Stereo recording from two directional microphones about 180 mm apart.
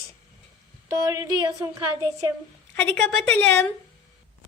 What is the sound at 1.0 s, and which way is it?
Speech, 20° right (ahead or behind).